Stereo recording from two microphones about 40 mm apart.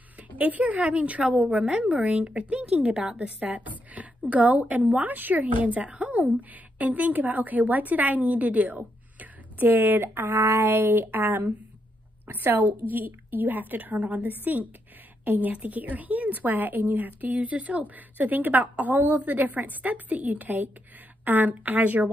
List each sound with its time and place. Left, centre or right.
0.4 s a woman's voice: right
3.3 s a sound: right
4.3 s a woman's voice: right
9.7 s a woman's voice: right